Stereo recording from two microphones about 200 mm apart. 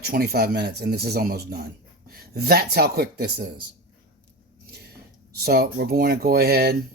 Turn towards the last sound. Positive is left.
turn(degrees=-50)  # may be behind; listen again after turning